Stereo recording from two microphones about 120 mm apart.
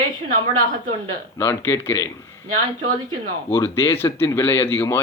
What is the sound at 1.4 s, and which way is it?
Speech, 20° left (ahead or behind).